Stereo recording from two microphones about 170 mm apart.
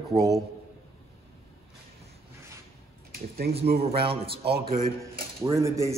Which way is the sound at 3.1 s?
60° right (ahead or behind).